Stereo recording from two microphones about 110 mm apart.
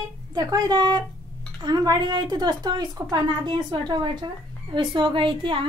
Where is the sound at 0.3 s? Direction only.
35° right (ahead or behind).